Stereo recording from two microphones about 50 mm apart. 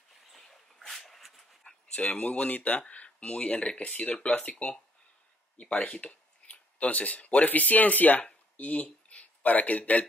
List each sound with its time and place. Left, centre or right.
0.3 s dog: centre
2.0 s speech: left